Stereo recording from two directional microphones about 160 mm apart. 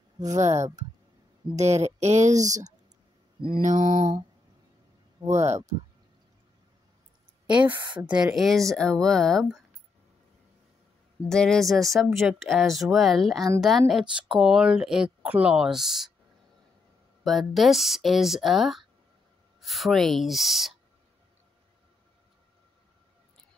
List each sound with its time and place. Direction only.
0.2 s speech: 45° right (ahead or behind)
5.4 s speech: 45° right (ahead or behind)
7.4 s speech: 10° right (ahead or behind)
11.2 s speech: 5° left (ahead or behind)
17.2 s speech: centre (ahead or behind)